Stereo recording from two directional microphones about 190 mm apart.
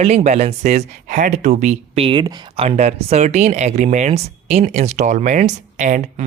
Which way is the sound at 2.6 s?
35° right (ahead or behind).